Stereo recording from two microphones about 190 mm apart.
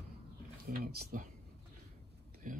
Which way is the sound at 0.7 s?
55° right (ahead or behind).